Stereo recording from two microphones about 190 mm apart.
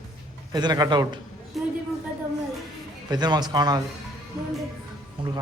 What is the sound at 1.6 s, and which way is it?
Speech, centre (ahead or behind).